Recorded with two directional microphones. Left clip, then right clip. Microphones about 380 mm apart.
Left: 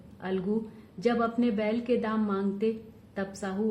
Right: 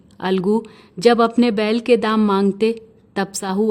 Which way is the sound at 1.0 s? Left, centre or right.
Right.